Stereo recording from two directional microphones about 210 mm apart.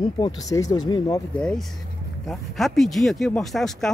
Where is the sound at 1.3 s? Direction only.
5° left (ahead or behind).